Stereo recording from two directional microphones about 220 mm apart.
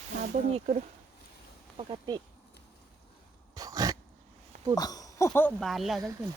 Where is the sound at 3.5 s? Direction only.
15° right (ahead or behind).